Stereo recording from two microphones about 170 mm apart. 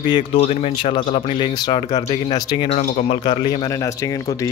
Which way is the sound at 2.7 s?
45° left (ahead or behind).